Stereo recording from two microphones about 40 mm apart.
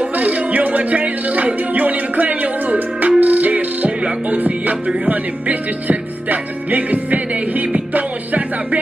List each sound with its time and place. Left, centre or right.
0.1 s music: right